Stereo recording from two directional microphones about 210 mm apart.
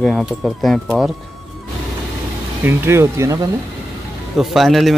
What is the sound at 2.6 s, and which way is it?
Speech, 10° right (ahead or behind).